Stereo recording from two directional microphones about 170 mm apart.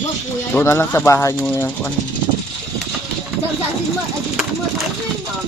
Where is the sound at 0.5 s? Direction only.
15° left (ahead or behind).